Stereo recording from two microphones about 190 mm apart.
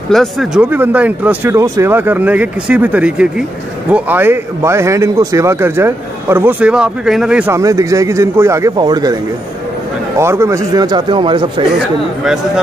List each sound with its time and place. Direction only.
0.1 s a man's voice: centre (ahead or behind); by 11.6 s 25° right (ahead or behind)